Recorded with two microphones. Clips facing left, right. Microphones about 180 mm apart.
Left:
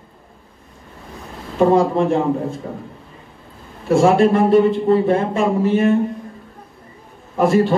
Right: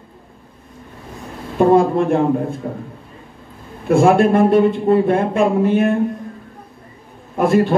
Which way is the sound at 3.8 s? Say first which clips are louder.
Right 1 dB; 55° right (ahead or behind).